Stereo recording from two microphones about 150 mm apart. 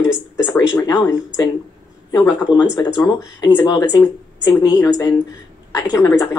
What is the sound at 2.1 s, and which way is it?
Speech, 30° left (ahead or behind).